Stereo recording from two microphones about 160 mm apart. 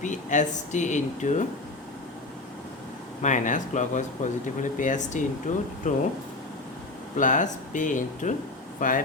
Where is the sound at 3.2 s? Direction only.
55° left (ahead or behind).